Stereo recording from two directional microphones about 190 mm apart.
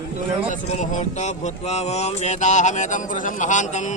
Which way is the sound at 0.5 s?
40° left (ahead or behind).